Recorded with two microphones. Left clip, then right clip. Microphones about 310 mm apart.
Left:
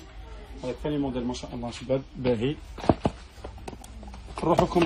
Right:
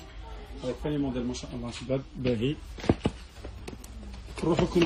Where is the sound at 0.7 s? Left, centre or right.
Centre.